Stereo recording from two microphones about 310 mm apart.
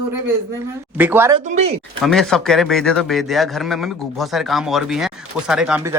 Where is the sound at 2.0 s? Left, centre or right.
Centre.